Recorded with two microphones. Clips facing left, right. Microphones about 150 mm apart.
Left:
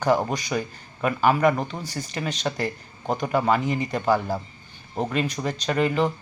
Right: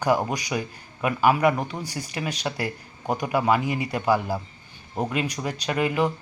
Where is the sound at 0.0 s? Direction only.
10° right (ahead or behind).